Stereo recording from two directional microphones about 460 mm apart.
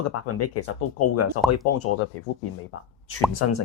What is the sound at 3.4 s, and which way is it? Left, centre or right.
Speech, left.